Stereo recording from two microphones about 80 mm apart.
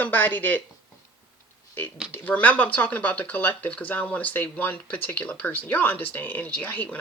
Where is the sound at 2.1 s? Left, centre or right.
Left.